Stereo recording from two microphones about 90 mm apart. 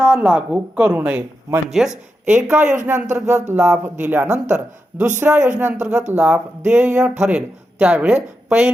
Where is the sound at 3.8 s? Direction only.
20° right (ahead or behind).